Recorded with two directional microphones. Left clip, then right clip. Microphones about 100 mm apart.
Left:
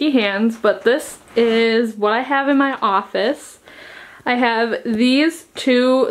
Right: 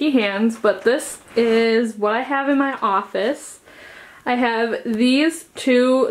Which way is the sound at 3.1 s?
40° left (ahead or behind).